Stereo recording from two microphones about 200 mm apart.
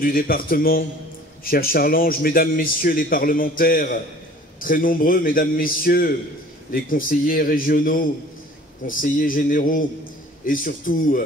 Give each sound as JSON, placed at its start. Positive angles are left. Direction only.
{"t": 0.0, "sound": "a man's voice", "side_deg": 45}